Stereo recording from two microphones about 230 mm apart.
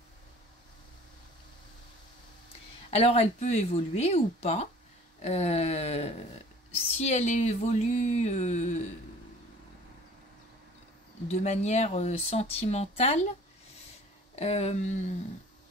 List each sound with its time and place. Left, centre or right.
2.9 s speech: left
11.2 s speech: left
14.3 s speech: left